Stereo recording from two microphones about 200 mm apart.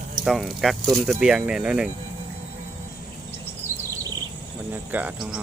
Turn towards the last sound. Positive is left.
turn(degrees=-5)  # may be behind; listen again after turning